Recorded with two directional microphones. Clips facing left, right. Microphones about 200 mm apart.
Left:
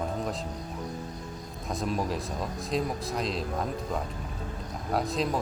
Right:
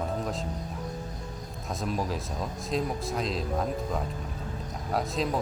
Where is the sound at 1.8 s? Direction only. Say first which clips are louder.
Left 1 dB; centre (ahead or behind).